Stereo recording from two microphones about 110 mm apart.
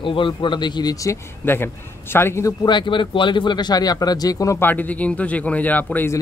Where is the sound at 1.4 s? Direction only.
20° left (ahead or behind).